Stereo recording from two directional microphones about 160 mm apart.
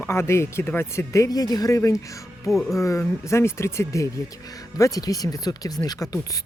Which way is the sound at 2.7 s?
20° left (ahead or behind).